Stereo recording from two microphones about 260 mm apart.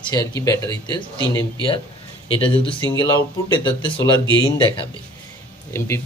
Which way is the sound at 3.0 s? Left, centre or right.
Centre.